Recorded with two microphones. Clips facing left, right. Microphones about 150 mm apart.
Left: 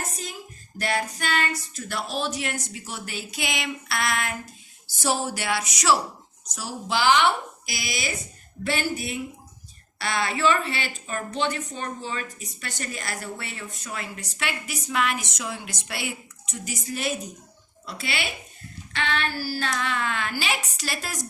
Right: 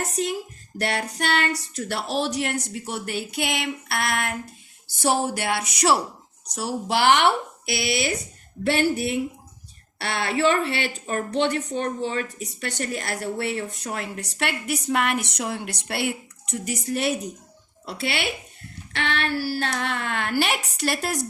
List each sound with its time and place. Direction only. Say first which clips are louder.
0.8 s a woman's voice: right 1 dB; 70° right (ahead or behind)